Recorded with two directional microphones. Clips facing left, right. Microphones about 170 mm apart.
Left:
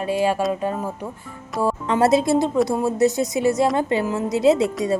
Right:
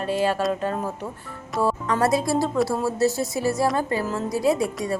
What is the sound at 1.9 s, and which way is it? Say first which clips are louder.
Speech: left 7 dB; 25° left (ahead or behind).